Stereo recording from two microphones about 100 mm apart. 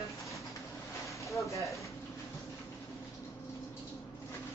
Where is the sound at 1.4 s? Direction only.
30° left (ahead or behind).